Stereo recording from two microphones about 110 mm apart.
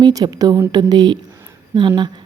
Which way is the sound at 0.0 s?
35° right (ahead or behind).